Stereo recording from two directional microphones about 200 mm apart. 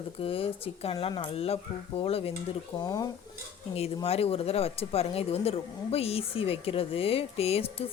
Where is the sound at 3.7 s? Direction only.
30° left (ahead or behind).